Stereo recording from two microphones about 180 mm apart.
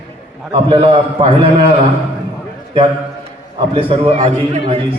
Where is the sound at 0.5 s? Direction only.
30° right (ahead or behind).